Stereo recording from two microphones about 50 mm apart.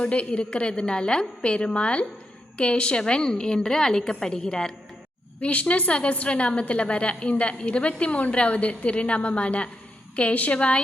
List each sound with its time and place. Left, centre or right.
0.0 s a woman's voice: left
5.4 s a woman's voice: left